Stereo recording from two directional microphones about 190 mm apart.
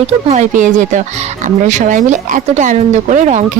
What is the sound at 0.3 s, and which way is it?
Speech, 40° right (ahead or behind).